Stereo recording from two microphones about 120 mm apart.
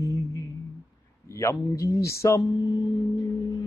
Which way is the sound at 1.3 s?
25° left (ahead or behind).